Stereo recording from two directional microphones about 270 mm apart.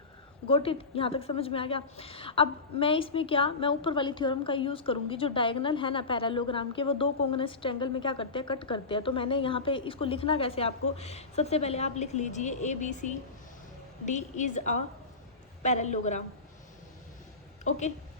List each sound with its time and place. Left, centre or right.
0.4 s a woman's voice: centre